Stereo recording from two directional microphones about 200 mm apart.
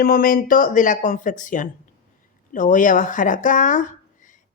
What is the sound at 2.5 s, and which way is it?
Speech, 40° left (ahead or behind).